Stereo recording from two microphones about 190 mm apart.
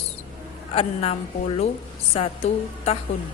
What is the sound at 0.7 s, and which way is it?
A woman's voice, 30° left (ahead or behind).